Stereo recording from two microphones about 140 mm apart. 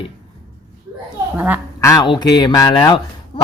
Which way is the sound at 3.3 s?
30° left (ahead or behind).